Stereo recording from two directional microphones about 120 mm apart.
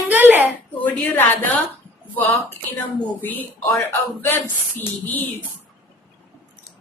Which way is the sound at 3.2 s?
15° left (ahead or behind).